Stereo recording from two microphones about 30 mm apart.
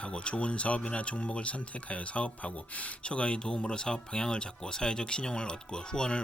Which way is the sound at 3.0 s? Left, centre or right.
Left.